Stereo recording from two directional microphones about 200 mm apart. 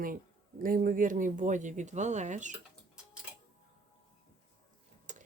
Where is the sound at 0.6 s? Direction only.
45° right (ahead or behind).